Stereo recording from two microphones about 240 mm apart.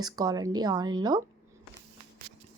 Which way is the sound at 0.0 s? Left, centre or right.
Centre.